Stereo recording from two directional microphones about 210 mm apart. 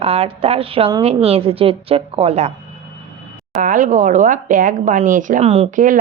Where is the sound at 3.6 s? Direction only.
40° right (ahead or behind).